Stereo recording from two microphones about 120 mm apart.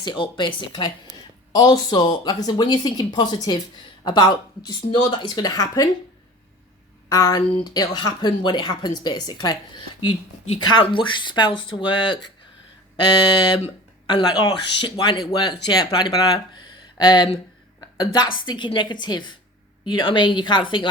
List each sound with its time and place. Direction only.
0.0 s a woman's voice: 40° left (ahead or behind)
7.1 s a woman's voice: 30° left (ahead or behind)